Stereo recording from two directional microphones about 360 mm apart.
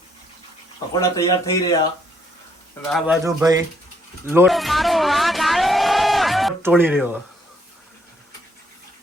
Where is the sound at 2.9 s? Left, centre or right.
Centre.